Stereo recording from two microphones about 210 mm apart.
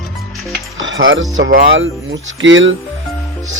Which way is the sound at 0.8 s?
65° right (ahead or behind).